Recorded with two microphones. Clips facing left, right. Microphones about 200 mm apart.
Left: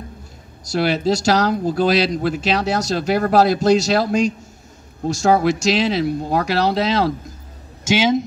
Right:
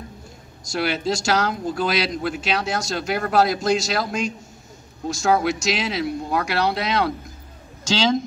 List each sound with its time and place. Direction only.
0.7 s speech: 35° left (ahead or behind)